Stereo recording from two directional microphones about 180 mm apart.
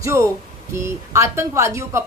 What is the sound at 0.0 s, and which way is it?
A woman's voice, 15° right (ahead or behind).